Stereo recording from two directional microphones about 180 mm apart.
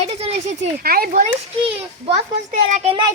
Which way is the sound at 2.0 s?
40° right (ahead or behind).